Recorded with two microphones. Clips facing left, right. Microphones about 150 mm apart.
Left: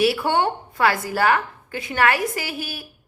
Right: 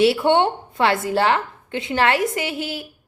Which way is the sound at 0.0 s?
25° right (ahead or behind).